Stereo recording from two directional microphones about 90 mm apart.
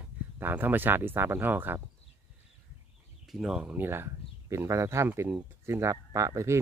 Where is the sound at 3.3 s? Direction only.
5° right (ahead or behind).